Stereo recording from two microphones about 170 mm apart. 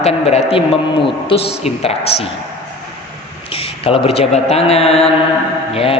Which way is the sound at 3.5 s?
35° left (ahead or behind).